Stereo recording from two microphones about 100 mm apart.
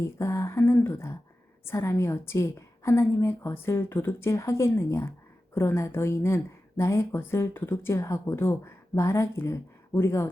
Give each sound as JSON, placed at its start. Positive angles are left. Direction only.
{"t": 0.2, "sound": "a woman's voice", "side_deg": 30}